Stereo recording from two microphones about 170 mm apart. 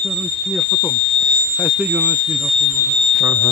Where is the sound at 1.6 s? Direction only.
15° right (ahead or behind).